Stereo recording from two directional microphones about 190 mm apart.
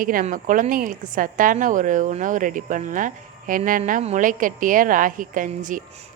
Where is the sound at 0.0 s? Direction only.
45° right (ahead or behind).